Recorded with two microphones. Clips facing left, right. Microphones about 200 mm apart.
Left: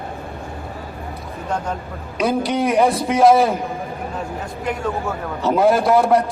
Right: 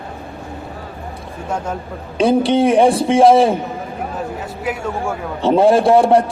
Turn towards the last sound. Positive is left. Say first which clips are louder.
# right 4 dB
turn(degrees=-30)  # may be behind; listen again after turning